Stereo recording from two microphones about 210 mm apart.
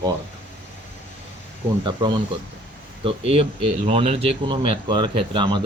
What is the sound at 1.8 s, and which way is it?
Speech, 20° right (ahead or behind).